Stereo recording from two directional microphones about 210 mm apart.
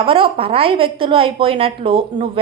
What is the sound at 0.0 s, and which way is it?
A woman's voice, 25° right (ahead or behind).